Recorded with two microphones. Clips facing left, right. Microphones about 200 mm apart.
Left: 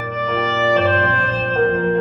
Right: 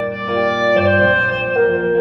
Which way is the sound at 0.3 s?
35° right (ahead or behind).